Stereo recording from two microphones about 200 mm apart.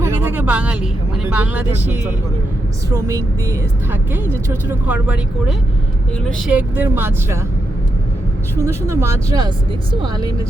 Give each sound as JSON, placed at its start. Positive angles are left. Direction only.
{"t": 0.0, "sound": "speech", "side_deg": -10}
{"t": 8.5, "sound": "speech", "side_deg": -15}